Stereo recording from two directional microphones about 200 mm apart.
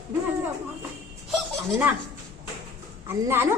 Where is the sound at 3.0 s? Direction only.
10° right (ahead or behind).